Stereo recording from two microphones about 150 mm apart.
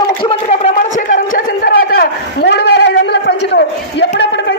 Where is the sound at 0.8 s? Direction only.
60° left (ahead or behind); by 3.1 s 90° left.